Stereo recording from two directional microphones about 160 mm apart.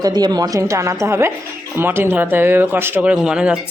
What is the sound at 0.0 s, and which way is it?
Speech, 25° right (ahead or behind).